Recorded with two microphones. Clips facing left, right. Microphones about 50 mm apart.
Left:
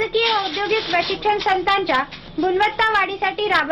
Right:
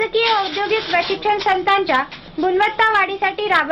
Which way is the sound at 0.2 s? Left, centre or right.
Right.